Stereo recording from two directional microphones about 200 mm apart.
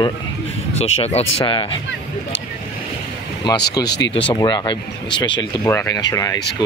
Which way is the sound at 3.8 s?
55° left (ahead or behind).